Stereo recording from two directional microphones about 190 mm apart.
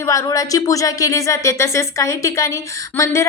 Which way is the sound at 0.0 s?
15° left (ahead or behind).